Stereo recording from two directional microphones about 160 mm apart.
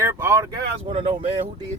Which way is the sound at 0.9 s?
35° right (ahead or behind).